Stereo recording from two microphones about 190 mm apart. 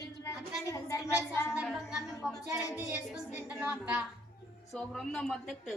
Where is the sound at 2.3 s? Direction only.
20° left (ahead or behind).